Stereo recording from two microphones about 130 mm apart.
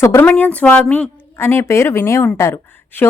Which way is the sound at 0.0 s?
15° left (ahead or behind).